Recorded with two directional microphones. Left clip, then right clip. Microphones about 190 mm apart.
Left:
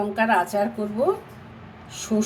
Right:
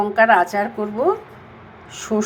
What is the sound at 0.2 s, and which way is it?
Speech, 15° right (ahead or behind).